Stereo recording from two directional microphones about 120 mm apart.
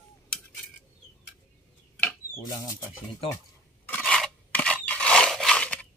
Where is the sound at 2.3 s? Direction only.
30° left (ahead or behind).